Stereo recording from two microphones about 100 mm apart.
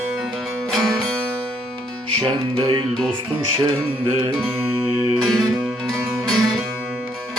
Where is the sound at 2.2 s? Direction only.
50° right (ahead or behind).